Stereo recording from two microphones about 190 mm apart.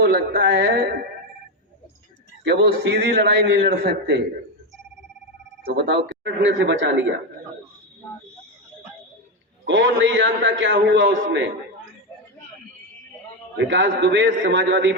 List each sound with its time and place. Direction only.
0.0 s a man's voice: 60° right (ahead or behind)
2.4 s a man's voice: 65° right (ahead or behind)
5.7 s a man's voice: 65° right (ahead or behind)
9.6 s a man's voice: 70° right (ahead or behind)
13.6 s a man's voice: 75° right (ahead or behind)